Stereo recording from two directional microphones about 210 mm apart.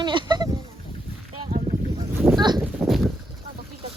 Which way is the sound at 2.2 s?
20° right (ahead or behind).